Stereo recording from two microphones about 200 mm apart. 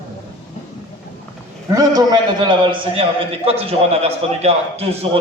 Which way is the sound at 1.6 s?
15° right (ahead or behind).